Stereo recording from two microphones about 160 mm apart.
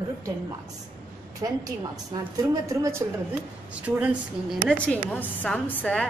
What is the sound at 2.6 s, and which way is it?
Speech, 20° right (ahead or behind).